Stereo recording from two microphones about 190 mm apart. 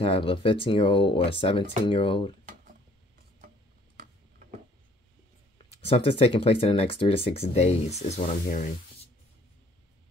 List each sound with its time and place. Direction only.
0.0 s speech: 30° left (ahead or behind)
5.6 s speech: 30° left (ahead or behind)